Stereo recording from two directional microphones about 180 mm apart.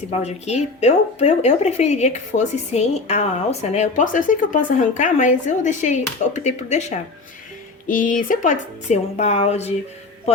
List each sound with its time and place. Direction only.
0.1 s speech: 35° left (ahead or behind)